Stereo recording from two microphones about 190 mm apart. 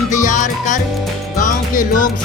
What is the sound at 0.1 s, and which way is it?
Music, 40° left (ahead or behind).